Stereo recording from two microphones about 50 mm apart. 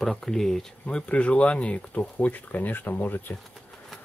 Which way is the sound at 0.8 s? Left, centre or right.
Left.